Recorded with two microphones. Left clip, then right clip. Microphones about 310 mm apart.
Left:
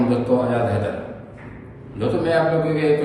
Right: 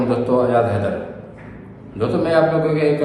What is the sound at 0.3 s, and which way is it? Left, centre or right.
Speech, centre.